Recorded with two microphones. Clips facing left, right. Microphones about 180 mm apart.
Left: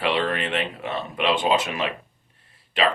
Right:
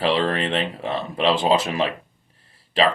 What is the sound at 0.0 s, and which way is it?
Speech, 30° right (ahead or behind).